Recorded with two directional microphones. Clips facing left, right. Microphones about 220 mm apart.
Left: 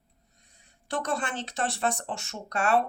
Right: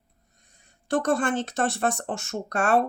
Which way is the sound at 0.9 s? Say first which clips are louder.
Right 7 dB; 50° right (ahead or behind).